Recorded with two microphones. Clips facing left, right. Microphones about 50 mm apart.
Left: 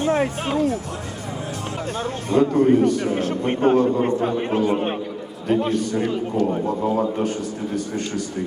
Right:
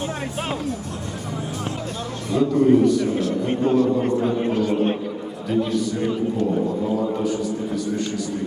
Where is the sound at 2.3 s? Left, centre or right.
Left.